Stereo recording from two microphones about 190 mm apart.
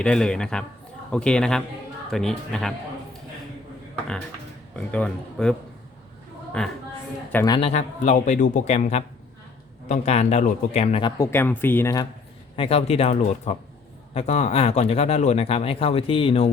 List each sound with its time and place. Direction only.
0.0 s speech: 5° left (ahead or behind)
4.8 s speech: 5° left (ahead or behind)
6.6 s speech: 5° left (ahead or behind)
7.3 s a man's voice: 20° left (ahead or behind)
7.7 s speech: 35° left (ahead or behind)
11.2 s speech: 10° left (ahead or behind)
12.5 s speech: 30° left (ahead or behind)